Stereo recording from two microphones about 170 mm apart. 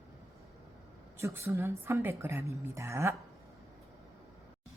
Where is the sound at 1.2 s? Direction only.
15° right (ahead or behind).